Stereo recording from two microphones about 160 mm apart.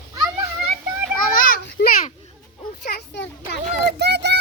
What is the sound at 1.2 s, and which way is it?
Children playing, 60° left (ahead or behind).